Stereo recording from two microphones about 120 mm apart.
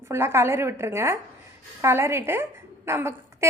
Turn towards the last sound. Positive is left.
turn(degrees=-20)  # may be behind; listen again after turning